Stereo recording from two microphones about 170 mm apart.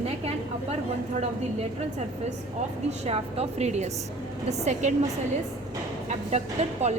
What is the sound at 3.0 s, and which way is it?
A woman's voice, 40° right (ahead or behind).